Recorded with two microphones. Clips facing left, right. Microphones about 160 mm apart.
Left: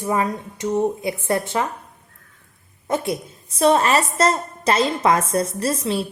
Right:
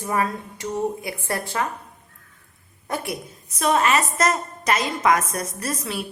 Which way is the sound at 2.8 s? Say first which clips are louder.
Left 6 dB; 25° left (ahead or behind).